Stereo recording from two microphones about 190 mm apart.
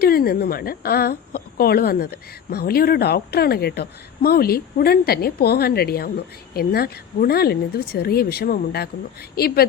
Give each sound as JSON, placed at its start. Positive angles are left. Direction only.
{"t": 0.0, "sound": "a woman's voice", "side_deg": 50}